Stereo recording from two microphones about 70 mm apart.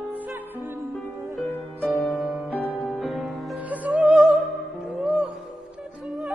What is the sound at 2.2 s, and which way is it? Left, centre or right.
Music, centre.